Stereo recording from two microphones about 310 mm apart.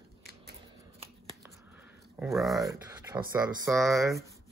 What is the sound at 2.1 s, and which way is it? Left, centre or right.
Speech, centre.